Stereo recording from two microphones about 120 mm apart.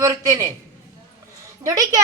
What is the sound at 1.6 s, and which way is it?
Speech, 30° right (ahead or behind).